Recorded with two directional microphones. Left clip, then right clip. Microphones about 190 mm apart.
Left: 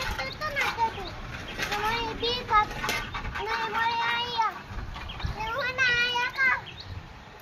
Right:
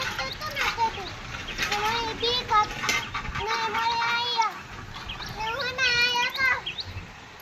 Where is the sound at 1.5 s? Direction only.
40° left (ahead or behind).